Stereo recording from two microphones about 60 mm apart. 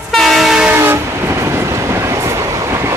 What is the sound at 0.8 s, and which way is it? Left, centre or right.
Train, right.